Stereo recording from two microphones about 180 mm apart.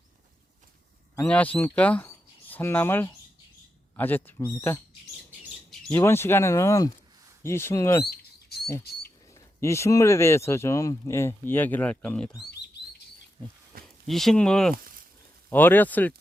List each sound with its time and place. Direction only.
1.3 s speech: 10° left (ahead or behind)
5.9 s speech: 15° left (ahead or behind)
8.0 s rodents: 60° left (ahead or behind)
9.3 s speech: 15° left (ahead or behind)
13.7 s a sound: 55° right (ahead or behind)
14.1 s speech: centre (ahead or behind)